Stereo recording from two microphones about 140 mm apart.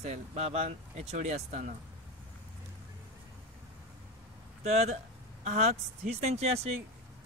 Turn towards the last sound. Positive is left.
turn(degrees=-50)  # may be behind; listen again after turning